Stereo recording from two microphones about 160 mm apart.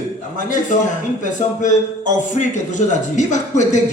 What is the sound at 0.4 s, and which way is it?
Speech, 50° left (ahead or behind).